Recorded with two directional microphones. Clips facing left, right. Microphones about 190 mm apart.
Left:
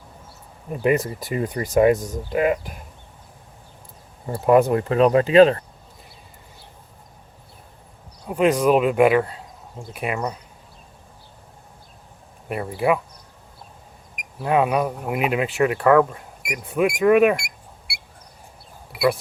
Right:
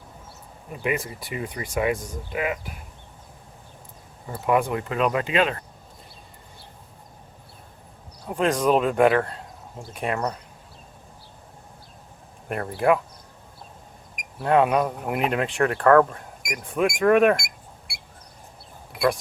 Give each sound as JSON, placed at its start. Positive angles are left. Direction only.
{"t": 0.7, "sound": "speech", "side_deg": 40}
{"t": 4.4, "sound": "speech", "side_deg": 40}
{"t": 8.3, "sound": "speech", "side_deg": 10}
{"t": 12.5, "sound": "speech", "side_deg": 5}
{"t": 14.4, "sound": "speech", "side_deg": 5}